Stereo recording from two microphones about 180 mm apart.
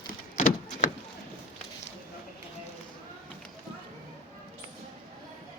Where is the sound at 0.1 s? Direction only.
45° left (ahead or behind).